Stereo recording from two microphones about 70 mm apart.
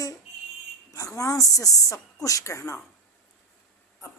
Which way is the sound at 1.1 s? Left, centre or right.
Left.